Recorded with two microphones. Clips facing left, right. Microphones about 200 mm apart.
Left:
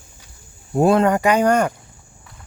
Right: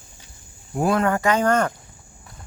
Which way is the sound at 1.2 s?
15° left (ahead or behind).